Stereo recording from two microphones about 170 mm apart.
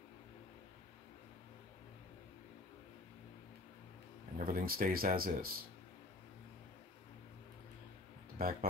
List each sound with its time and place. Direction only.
4.4 s speech: 55° right (ahead or behind)
8.4 s speech: 60° right (ahead or behind)